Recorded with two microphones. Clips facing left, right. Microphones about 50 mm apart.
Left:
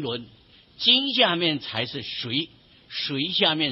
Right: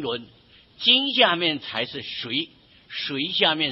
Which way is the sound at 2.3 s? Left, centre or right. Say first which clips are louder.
Even; centre.